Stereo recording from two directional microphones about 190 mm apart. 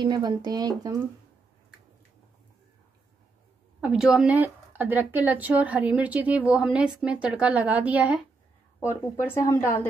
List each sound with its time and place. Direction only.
0.0 s speech: 25° right (ahead or behind)
3.8 s speech: 5° right (ahead or behind)
8.7 s speech: 10° left (ahead or behind)